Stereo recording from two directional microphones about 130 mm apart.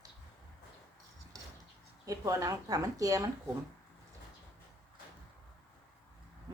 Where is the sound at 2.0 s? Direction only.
25° right (ahead or behind).